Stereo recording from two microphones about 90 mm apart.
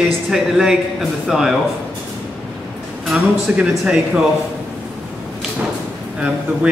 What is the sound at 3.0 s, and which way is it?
Speech, 10° right (ahead or behind).